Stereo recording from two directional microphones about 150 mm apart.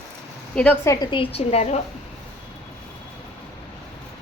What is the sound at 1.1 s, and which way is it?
Speech, 40° left (ahead or behind).